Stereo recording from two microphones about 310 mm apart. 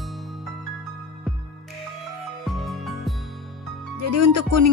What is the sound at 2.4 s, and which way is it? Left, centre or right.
Music, centre.